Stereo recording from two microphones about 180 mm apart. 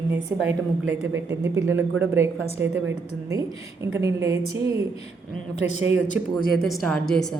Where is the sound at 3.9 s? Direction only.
15° right (ahead or behind).